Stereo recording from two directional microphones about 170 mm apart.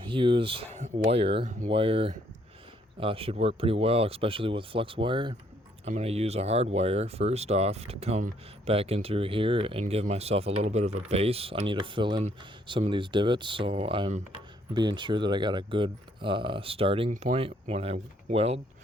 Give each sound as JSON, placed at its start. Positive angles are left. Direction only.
{"t": 0.0, "sound": "speech", "side_deg": -30}